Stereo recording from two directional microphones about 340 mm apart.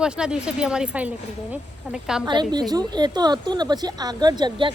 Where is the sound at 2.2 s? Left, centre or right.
Centre.